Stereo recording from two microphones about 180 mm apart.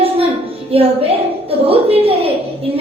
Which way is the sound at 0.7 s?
30° right (ahead or behind).